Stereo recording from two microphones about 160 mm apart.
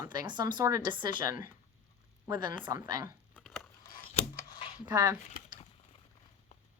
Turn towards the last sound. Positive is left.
turn(degrees=40)  # may be behind; listen again after turning